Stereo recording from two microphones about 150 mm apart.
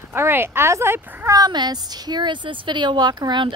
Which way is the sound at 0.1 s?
15° right (ahead or behind).